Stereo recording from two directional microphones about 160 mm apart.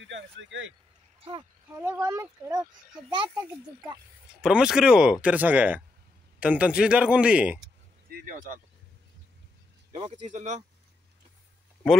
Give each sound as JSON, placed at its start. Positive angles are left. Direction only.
{"t": 1.8, "sound": "a child's voice", "side_deg": -15}
{"t": 4.4, "sound": "speech", "side_deg": -5}